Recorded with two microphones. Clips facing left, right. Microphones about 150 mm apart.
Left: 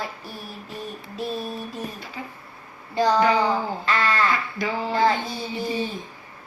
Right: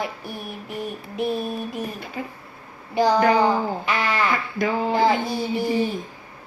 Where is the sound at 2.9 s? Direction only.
15° right (ahead or behind).